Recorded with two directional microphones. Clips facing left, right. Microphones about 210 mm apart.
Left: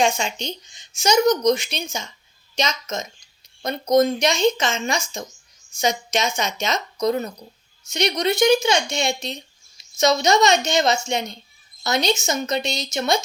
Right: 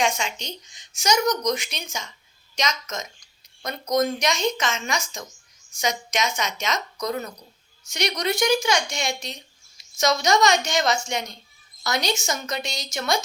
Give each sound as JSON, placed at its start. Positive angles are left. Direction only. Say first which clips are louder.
{"t": 0.0, "sound": "speech", "louder": "left 4 dB", "side_deg": 30}